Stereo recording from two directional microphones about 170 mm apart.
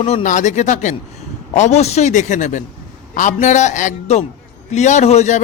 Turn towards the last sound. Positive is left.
turn(degrees=45)  # may be behind; listen again after turning